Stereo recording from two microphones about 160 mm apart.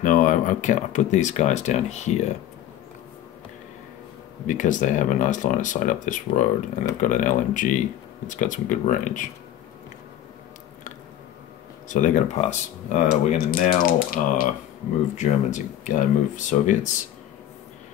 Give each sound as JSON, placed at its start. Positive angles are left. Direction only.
{"t": 0.0, "sound": "speech", "side_deg": 55}
{"t": 4.5, "sound": "speech", "side_deg": 50}
{"t": 11.9, "sound": "speech", "side_deg": 50}
{"t": 13.3, "sound": "speech", "side_deg": 60}
{"t": 15.1, "sound": "speech", "side_deg": 50}